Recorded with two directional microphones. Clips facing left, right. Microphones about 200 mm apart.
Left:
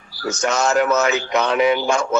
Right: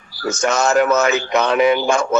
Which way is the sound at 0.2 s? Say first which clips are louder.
Right 2 dB; 50° right (ahead or behind).